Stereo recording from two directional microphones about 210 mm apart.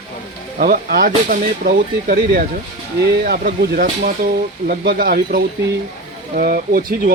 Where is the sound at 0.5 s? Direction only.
45° right (ahead or behind).